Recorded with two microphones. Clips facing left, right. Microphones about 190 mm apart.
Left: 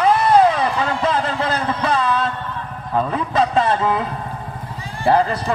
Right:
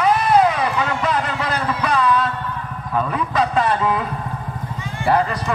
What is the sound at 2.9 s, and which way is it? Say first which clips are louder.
A man's voice: left 1 dB; 30° left (ahead or behind).